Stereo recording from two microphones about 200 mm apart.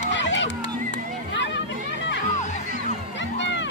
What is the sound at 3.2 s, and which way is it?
Music, 65° left (ahead or behind).